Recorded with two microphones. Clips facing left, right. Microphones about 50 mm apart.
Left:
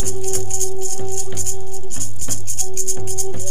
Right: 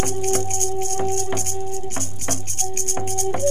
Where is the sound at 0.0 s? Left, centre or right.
Right.